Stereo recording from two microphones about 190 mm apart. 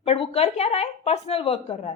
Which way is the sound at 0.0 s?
30° left (ahead or behind).